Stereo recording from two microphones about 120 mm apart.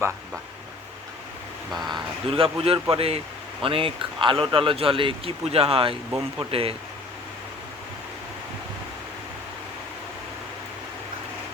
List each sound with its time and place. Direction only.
1.9 s speech: 50° right (ahead or behind)